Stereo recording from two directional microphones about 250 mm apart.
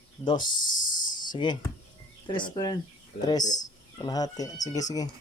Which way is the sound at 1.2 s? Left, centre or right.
Centre.